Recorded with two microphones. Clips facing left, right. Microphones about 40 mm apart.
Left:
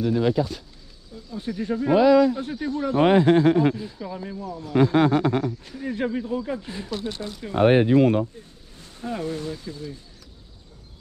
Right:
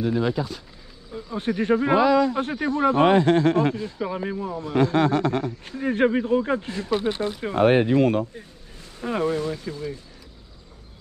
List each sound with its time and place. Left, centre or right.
0.2 s speech: centre
1.1 s speech: right
2.0 s speech: centre
2.3 s speech: right
3.0 s speech: centre
4.0 s speech: right
4.7 s speech: centre
5.7 s speech: right
7.5 s speech: centre
9.0 s speech: right